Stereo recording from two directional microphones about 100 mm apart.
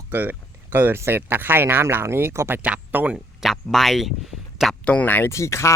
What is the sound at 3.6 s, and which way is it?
Speech, centre (ahead or behind).